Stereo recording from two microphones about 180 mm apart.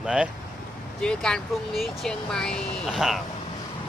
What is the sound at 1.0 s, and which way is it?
Speech, 5° left (ahead or behind).